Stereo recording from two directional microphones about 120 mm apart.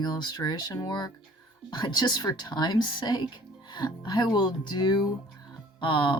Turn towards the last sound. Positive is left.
turn(degrees=40)  # may be behind; listen again after turning